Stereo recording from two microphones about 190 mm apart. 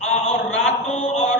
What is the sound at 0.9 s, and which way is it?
Mantra, 35° left (ahead or behind).